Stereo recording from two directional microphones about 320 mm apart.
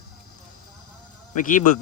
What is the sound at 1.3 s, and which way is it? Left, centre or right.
Speech, left.